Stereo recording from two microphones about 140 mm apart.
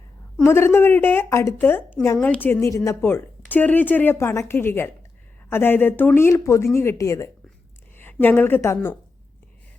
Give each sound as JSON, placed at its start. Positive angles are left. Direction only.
{"t": 0.4, "sound": "a woman's voice", "side_deg": 15}